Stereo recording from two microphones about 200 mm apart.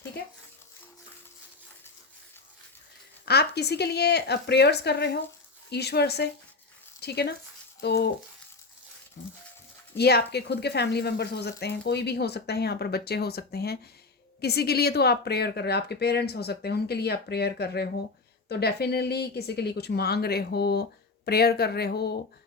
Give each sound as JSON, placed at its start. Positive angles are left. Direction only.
{"t": 3.2, "sound": "speech", "side_deg": 55}
{"t": 9.2, "sound": "speech", "side_deg": 60}